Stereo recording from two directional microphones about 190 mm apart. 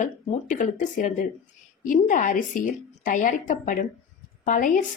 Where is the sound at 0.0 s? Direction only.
45° left (ahead or behind).